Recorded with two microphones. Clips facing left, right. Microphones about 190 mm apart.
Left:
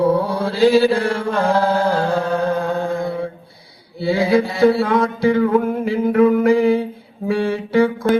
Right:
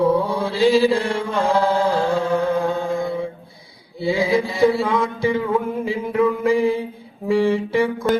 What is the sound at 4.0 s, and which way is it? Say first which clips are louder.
Mantra: left 3 dB; 65° left (ahead or behind).